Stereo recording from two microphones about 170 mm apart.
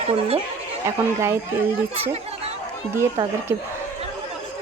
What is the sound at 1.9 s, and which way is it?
Chatter, 40° right (ahead or behind).